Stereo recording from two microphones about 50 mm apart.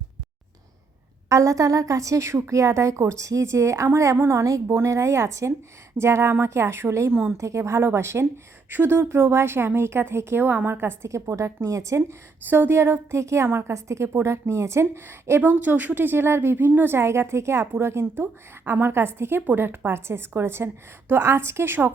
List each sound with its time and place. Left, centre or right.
1.3 s a woman's voice: right
4.7 s speech: right
6.0 s a woman's voice: right
7.3 s a woman's voice: right
8.7 s a woman's voice: right
11.1 s a woman's voice: right
12.5 s a woman's voice: right
13.7 s a woman's voice: right